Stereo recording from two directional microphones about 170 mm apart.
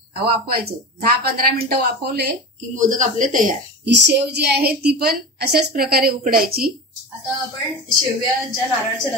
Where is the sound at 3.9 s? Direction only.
90° right; by 6.7 s 60° right (ahead or behind).